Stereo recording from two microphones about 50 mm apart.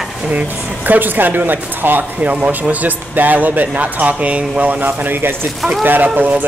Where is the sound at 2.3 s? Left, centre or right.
Right.